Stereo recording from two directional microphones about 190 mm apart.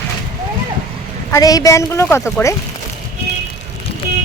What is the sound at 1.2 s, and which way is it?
A woman's voice, 15° left (ahead or behind).